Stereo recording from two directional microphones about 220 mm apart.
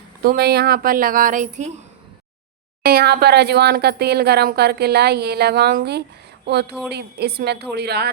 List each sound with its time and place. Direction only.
0.2 s speech: 45° right (ahead or behind)
2.8 s speech: 45° right (ahead or behind)